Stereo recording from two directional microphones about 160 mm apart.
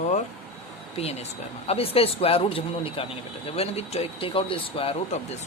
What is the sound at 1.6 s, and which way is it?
Speech, 35° left (ahead or behind).